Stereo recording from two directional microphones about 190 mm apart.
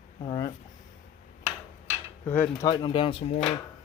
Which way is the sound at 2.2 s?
10° left (ahead or behind).